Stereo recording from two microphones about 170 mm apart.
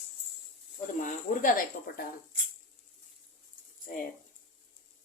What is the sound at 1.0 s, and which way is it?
Speech, 50° left (ahead or behind).